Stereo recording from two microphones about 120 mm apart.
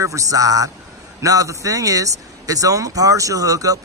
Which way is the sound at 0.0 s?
25° right (ahead or behind).